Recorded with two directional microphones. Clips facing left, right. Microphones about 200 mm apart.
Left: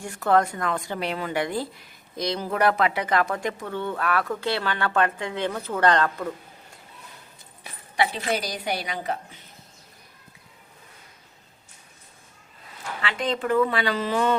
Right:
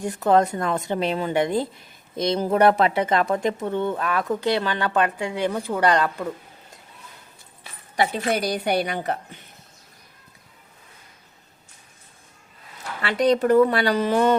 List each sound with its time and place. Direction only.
0.0 s a woman's voice: 20° right (ahead or behind)
7.9 s a woman's voice: 40° right (ahead or behind)
13.0 s speech: 40° right (ahead or behind)